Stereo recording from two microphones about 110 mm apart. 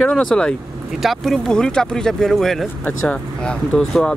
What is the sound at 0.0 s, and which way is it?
Speech, 10° left (ahead or behind).